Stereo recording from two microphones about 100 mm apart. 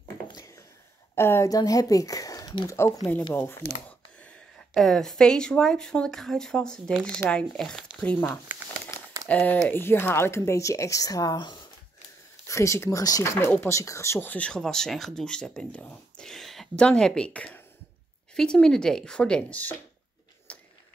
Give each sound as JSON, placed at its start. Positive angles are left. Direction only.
{"t": 1.1, "sound": "speech", "side_deg": 25}
{"t": 1.5, "sound": "speech", "side_deg": 35}
{"t": 4.2, "sound": "speech", "side_deg": 10}
{"t": 9.3, "sound": "speech", "side_deg": 15}
{"t": 12.4, "sound": "speech", "side_deg": 30}
{"t": 20.5, "sound": "printer", "side_deg": 15}